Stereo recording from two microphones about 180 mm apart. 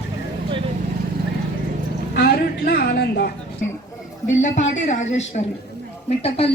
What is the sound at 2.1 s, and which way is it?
Speech, 60° left (ahead or behind).